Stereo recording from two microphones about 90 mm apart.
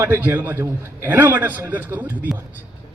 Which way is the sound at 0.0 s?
20° right (ahead or behind).